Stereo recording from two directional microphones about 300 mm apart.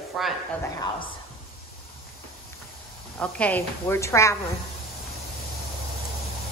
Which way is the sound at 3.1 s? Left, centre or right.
Centre.